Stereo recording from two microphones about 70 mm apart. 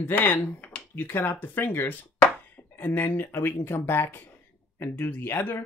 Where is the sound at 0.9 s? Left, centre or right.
Left.